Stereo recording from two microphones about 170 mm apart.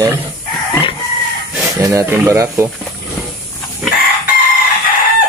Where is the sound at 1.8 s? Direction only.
20° right (ahead or behind).